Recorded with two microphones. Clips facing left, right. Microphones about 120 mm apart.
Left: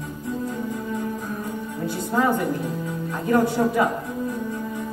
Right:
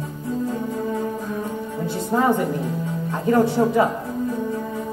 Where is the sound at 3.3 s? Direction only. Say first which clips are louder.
Right 2 dB; 25° right (ahead or behind).